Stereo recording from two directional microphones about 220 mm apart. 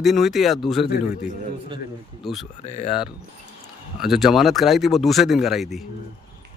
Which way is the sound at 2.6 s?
30° left (ahead or behind).